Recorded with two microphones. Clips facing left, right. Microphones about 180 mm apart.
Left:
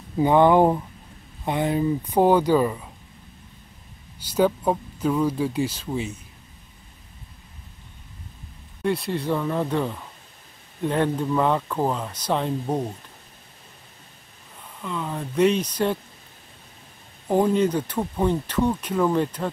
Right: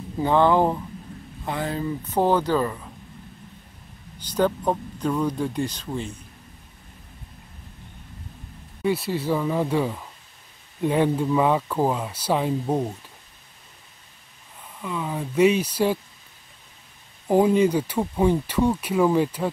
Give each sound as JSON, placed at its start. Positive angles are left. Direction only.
{"t": 0.2, "sound": "speech", "side_deg": 15}
{"t": 4.2, "sound": "speech", "side_deg": 10}
{"t": 8.8, "sound": "speech", "side_deg": -5}
{"t": 14.8, "sound": "speech", "side_deg": -5}
{"t": 17.3, "sound": "speech", "side_deg": -10}